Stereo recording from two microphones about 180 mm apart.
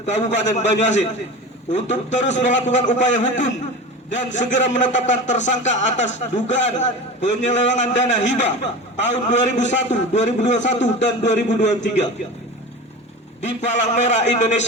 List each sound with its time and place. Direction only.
0.0 s a man's voice: 40° left (ahead or behind)
13.4 s a man's voice: 40° left (ahead or behind)